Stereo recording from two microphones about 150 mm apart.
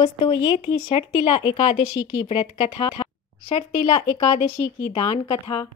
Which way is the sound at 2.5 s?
40° left (ahead or behind).